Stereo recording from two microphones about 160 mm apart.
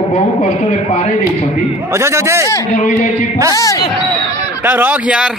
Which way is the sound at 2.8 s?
50° left (ahead or behind).